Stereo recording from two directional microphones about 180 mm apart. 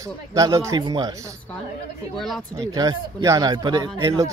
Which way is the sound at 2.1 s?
Centre (ahead or behind).